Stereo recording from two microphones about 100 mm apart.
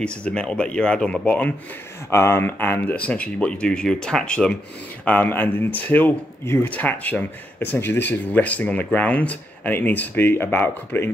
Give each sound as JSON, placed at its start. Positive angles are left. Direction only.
{"t": 0.0, "sound": "speech", "side_deg": 10}
{"t": 2.0, "sound": "speech", "side_deg": 25}